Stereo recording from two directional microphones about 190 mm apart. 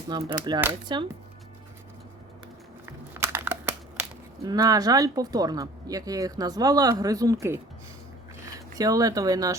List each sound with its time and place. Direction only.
0.1 s speech: 20° right (ahead or behind)
3.2 s crumpling: 10° right (ahead or behind)
4.4 s speech: 20° right (ahead or behind)
8.8 s speech: 20° right (ahead or behind)